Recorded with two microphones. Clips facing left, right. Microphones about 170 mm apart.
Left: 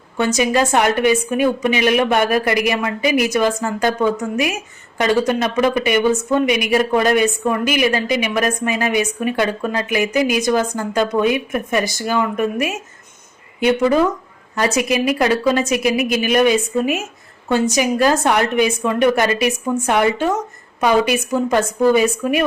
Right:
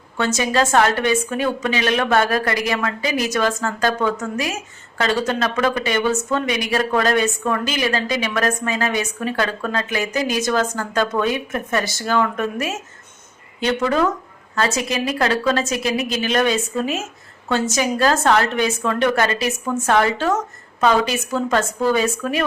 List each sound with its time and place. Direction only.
0.3 s a woman's voice: 15° left (ahead or behind)